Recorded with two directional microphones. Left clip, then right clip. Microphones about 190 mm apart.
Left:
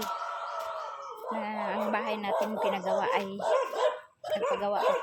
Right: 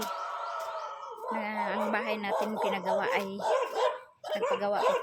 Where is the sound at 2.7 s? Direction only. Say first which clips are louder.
Even; 5° right (ahead or behind).